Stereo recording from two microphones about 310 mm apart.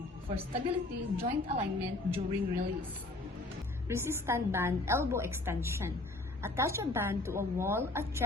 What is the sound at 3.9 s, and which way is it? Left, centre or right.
A woman's voice, centre.